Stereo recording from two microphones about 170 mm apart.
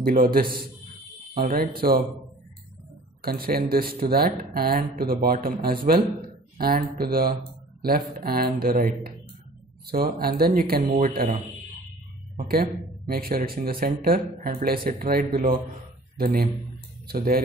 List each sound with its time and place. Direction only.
0.0 s speech: 60° right (ahead or behind)
3.2 s speech: 60° right (ahead or behind)
12.4 s speech: 55° right (ahead or behind)